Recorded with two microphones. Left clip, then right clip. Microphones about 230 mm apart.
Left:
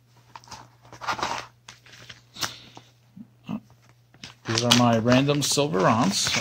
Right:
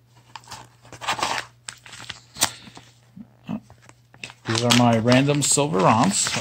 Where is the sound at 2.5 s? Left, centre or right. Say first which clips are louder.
Right 2 dB; centre.